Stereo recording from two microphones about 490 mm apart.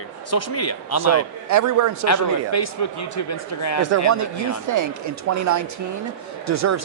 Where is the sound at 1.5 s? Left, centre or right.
Right.